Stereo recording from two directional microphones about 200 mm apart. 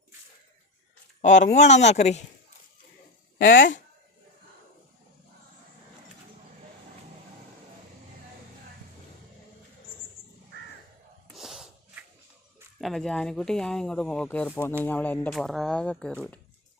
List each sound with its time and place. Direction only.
1.2 s speech: 35° left (ahead or behind)
3.3 s speech: 45° left (ahead or behind)
11.3 s sneeze: centre (ahead or behind)
12.8 s speech: centre (ahead or behind)